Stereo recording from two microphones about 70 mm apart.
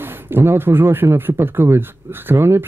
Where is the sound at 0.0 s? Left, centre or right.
Right.